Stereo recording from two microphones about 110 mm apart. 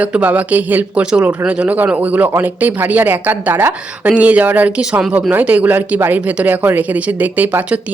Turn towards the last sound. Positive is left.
turn(degrees=-15)  # may be behind; listen again after turning